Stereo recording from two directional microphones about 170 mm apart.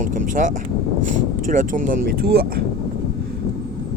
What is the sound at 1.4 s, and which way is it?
Speech, 50° right (ahead or behind).